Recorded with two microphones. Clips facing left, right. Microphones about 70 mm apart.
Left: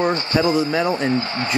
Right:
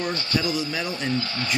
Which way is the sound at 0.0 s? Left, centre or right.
Left.